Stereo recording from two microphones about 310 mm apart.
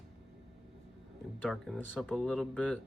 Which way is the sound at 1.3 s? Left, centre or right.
Centre.